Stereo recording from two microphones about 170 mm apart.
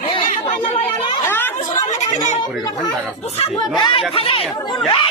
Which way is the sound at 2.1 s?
45° left (ahead or behind).